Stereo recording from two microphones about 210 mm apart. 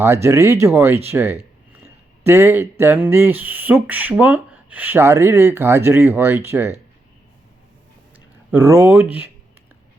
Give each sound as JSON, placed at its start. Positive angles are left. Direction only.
{"t": 0.0, "sound": "speech", "side_deg": -10}
{"t": 8.4, "sound": "speech", "side_deg": -10}